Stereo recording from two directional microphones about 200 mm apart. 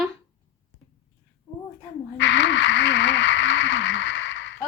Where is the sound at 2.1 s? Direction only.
60° left (ahead or behind).